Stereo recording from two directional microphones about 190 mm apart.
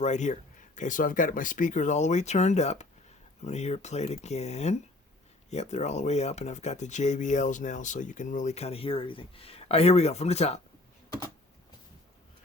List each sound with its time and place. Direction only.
0.0 s speech: 40° left (ahead or behind)